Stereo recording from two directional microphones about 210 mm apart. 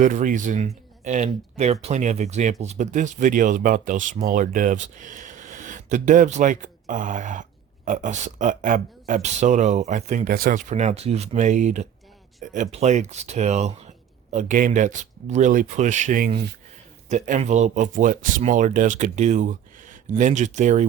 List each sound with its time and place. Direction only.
0.0 s speech: 40° right (ahead or behind)